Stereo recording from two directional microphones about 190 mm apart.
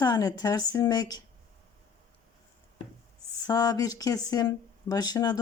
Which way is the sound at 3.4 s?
20° left (ahead or behind).